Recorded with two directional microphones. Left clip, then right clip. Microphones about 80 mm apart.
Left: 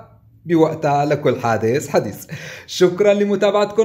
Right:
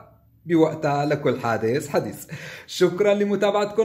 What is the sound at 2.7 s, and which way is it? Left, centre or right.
Speech, centre.